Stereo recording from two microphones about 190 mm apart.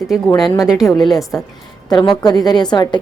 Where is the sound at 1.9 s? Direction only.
20° left (ahead or behind).